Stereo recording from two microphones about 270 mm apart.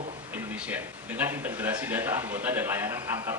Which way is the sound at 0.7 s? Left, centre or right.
Centre.